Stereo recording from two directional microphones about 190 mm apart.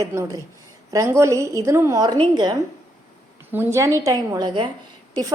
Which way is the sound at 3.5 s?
15° right (ahead or behind).